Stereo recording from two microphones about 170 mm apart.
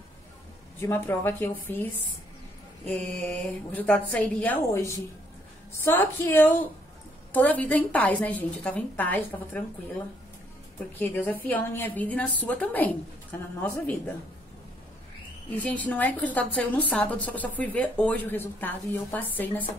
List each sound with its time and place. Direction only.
0.7 s a woman's voice: 15° left (ahead or behind)
11.0 s a woman's voice: 10° left (ahead or behind)
15.5 s a woman's voice: 10° left (ahead or behind)